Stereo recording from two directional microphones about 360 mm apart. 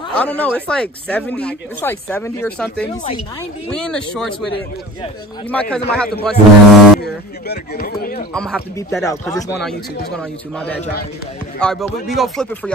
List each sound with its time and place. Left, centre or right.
0.2 s speech: centre
5.5 s speech: centre
7.0 s speech: left
8.3 s speech: centre